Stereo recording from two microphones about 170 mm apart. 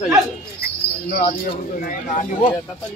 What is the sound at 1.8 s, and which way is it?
Speech, 55° left (ahead or behind).